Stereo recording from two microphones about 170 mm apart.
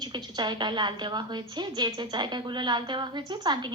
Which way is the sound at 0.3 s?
25° right (ahead or behind).